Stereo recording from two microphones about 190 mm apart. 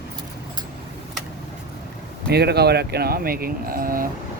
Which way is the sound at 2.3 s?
60° right (ahead or behind).